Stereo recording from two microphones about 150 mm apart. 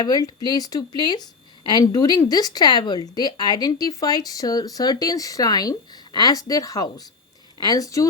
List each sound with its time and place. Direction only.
0.0 s a woman's voice: 25° left (ahead or behind)